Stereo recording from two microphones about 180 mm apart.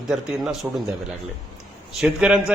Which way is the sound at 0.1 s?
5° right (ahead or behind).